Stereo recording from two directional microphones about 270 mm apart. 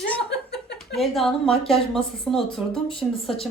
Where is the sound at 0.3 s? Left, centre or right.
Left.